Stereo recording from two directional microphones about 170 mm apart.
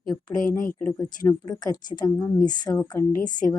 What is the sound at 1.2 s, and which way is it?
Speech, 25° left (ahead or behind).